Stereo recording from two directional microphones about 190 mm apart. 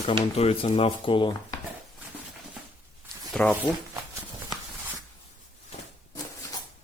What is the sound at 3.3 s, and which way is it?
Speech, 5° left (ahead or behind).